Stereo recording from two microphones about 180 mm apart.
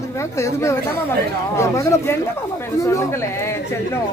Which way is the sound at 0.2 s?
15° left (ahead or behind).